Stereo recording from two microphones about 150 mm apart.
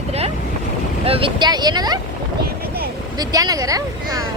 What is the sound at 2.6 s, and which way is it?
Vehicle, 90° right.